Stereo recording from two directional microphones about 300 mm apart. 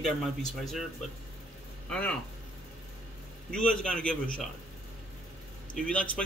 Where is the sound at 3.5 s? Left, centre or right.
Centre.